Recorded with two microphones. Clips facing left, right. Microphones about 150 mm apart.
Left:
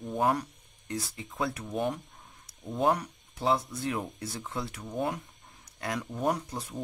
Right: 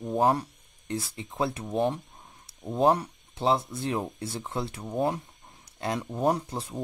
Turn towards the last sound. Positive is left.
turn(degrees=-30)  # may be behind; listen again after turning